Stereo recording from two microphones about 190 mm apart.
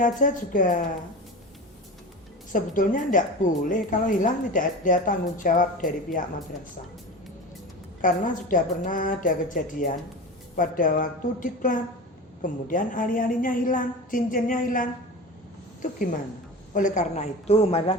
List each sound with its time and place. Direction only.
0.0 s a woman's voice: 45° left (ahead or behind)
2.5 s a woman's voice: 45° left (ahead or behind)
8.0 s a woman's voice: 45° left (ahead or behind)
16.7 s a woman's voice: 40° left (ahead or behind)